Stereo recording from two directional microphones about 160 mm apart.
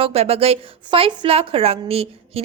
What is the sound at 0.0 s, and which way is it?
A woman's voice, 40° right (ahead or behind).